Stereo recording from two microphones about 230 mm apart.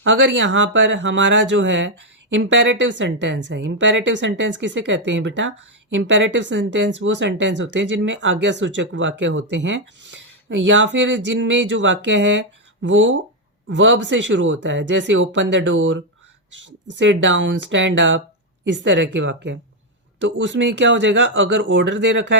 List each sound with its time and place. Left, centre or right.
0.0 s speech: right